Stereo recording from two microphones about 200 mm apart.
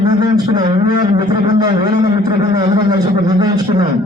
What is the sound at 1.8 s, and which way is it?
A man's voice, 20° right (ahead or behind).